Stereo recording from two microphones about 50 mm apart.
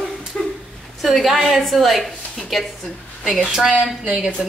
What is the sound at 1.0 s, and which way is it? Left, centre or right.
A woman's voice, centre.